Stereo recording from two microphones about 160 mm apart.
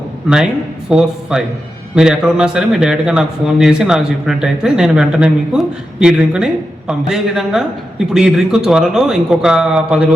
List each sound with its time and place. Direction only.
0.9 s speech: 5° right (ahead or behind)